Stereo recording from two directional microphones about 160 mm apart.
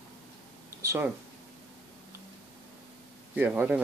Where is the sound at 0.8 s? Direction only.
15° right (ahead or behind).